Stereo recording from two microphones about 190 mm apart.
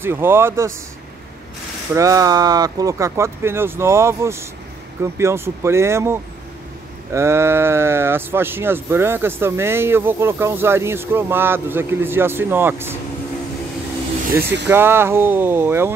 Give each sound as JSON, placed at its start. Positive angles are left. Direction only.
{"t": 0.0, "sound": "speech", "side_deg": -10}
{"t": 2.0, "sound": "speech", "side_deg": -15}
{"t": 14.4, "sound": "speech", "side_deg": -65}
{"t": 14.7, "sound": "speech", "side_deg": -10}